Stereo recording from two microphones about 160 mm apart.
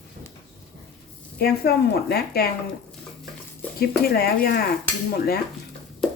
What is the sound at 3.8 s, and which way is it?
Speech, 75° left (ahead or behind).